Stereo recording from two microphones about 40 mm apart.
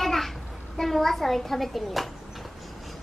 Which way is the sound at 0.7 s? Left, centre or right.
Centre.